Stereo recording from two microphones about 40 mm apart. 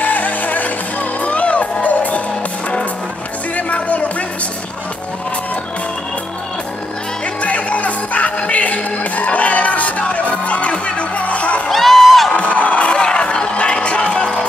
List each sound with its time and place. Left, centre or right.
0.0 s music: left
3.5 s music: left
7.4 s music: left
11.7 s music: centre
12.3 s music: left
12.8 s music: left